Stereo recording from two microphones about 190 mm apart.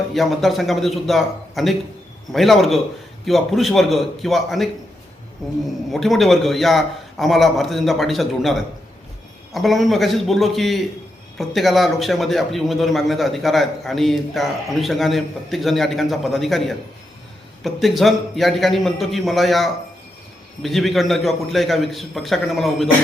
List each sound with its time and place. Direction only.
0.1 s a man's voice: centre (ahead or behind)
5.9 s a man's voice: centre (ahead or behind)